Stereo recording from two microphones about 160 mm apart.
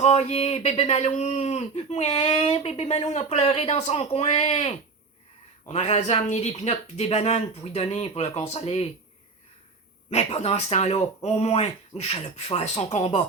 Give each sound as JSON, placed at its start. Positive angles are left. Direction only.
{"t": 0.0, "sound": "speech", "side_deg": 40}
{"t": 10.1, "sound": "speech", "side_deg": 40}